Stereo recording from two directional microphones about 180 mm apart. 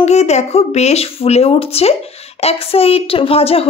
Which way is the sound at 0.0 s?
35° left (ahead or behind).